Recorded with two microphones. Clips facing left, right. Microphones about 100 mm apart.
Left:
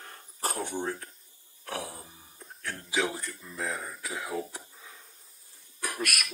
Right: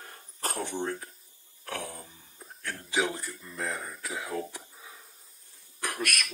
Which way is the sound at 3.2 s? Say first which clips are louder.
Even; centre (ahead or behind).